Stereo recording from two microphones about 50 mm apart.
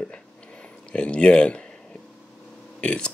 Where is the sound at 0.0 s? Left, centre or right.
Centre.